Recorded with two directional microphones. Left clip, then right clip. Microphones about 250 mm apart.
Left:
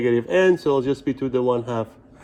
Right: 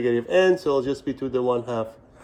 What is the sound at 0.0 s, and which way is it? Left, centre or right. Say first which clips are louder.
Speech: left 1 dB; centre.